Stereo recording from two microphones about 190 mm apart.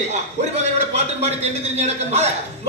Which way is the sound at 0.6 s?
35° right (ahead or behind).